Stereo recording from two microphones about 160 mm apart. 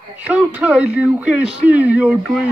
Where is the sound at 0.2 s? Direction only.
10° right (ahead or behind).